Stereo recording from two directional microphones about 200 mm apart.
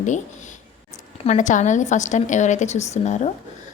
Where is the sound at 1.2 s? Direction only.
40° left (ahead or behind).